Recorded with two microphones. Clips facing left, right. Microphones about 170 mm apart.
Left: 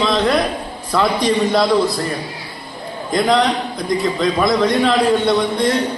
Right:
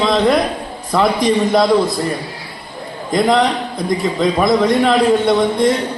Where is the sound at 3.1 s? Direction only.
20° right (ahead or behind).